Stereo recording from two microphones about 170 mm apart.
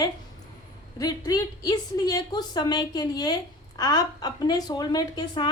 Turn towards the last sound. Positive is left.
turn(degrees=25)  # may be behind; listen again after turning